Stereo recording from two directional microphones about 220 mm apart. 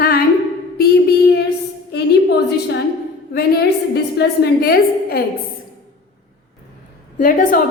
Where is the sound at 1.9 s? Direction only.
50° left (ahead or behind).